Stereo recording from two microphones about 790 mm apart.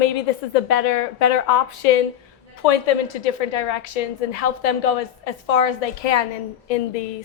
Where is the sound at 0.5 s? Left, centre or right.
Left.